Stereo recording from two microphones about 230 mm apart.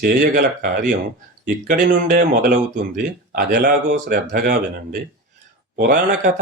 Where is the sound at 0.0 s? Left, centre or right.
Right.